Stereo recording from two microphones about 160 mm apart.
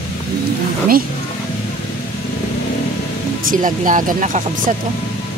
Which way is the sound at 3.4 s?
55° right (ahead or behind).